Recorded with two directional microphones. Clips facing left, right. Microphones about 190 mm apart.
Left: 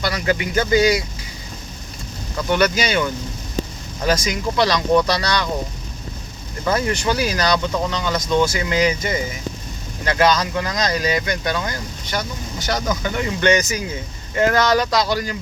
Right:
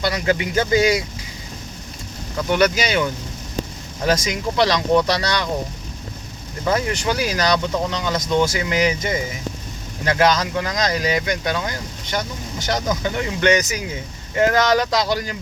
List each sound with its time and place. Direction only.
0.0 s speech: 25° right (ahead or behind)
2.5 s speech: 15° right (ahead or behind)
6.7 s speech: 15° right (ahead or behind)